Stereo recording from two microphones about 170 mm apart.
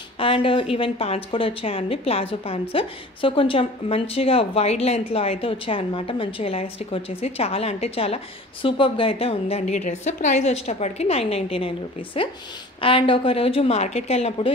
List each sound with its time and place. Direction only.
0.2 s a woman's voice: 30° left (ahead or behind)